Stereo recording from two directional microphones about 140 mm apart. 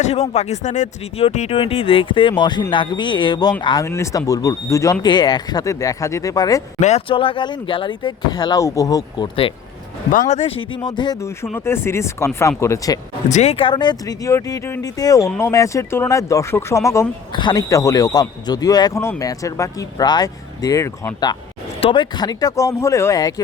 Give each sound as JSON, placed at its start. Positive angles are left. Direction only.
{"t": 0.0, "sound": "speech", "side_deg": 50}
{"t": 3.8, "sound": "speech", "side_deg": 20}
{"t": 6.7, "sound": "speech", "side_deg": 55}
{"t": 7.1, "sound": "speech", "side_deg": 40}
{"t": 10.1, "sound": "speech", "side_deg": 65}
{"t": 10.8, "sound": "speech", "side_deg": 30}
{"t": 11.5, "sound": "speech", "side_deg": 15}
{"t": 13.2, "sound": "speech", "side_deg": 55}
{"t": 21.8, "sound": "speech", "side_deg": 35}